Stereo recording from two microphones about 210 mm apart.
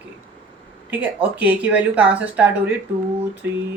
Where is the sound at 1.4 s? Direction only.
5° right (ahead or behind).